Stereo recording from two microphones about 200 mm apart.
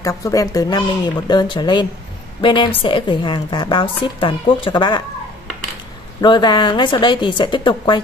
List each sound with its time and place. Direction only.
0.0 s a woman's voice: 15° left (ahead or behind)
6.2 s a woman's voice: 20° left (ahead or behind)